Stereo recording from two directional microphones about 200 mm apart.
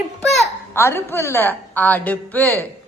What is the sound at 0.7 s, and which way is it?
A woman's voice, 10° left (ahead or behind).